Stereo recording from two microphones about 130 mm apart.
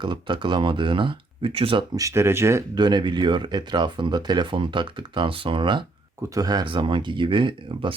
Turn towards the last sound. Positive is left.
turn(degrees=-40)  # may be behind; listen again after turning